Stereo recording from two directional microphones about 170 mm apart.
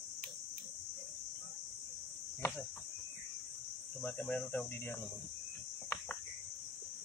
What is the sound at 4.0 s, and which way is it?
Speech, 10° left (ahead or behind).